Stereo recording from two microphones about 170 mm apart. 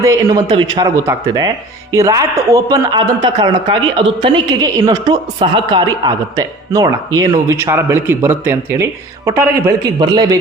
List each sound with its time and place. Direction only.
0.0 s a woman's voice: 20° right (ahead or behind)